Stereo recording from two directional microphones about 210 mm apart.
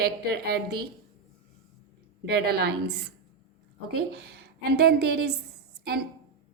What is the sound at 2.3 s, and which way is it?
Speech, 50° right (ahead or behind).